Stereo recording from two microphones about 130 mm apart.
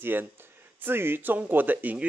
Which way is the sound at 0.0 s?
15° right (ahead or behind).